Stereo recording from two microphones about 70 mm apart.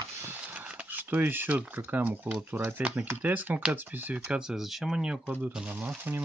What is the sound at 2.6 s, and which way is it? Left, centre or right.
Speech, right.